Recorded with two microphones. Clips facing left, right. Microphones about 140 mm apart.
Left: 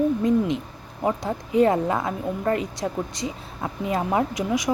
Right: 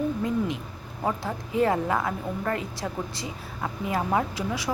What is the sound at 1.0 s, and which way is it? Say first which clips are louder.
Speech: left 4 dB; 15° left (ahead or behind).